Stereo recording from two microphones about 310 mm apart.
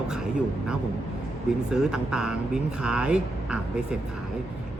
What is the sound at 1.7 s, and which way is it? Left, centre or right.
Speech, centre.